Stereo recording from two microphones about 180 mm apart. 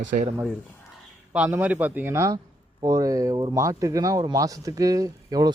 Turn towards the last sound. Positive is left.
turn(degrees=-20)  # may be behind; listen again after turning